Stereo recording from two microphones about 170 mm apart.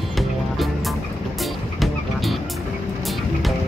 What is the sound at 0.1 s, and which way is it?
Music, centre (ahead or behind).